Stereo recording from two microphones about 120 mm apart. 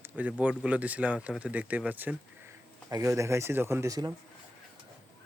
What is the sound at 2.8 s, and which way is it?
Speech, 30° right (ahead or behind).